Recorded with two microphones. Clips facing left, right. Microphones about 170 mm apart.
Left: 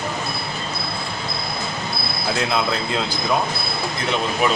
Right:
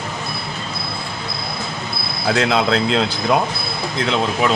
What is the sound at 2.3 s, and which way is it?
Speech, 90° right.